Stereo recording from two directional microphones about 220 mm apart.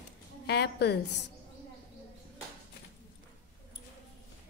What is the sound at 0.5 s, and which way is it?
Speech, 50° left (ahead or behind).